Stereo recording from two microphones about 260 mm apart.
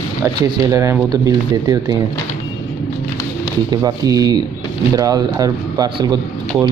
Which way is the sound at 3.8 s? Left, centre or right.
Centre.